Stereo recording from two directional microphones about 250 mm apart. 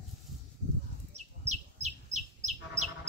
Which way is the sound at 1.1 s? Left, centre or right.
Right.